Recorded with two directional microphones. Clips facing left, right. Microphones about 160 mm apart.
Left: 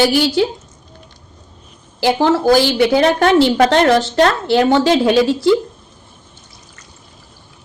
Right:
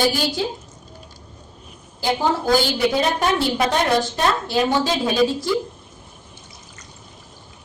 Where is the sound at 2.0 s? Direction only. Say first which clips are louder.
Left 7 dB; 85° left.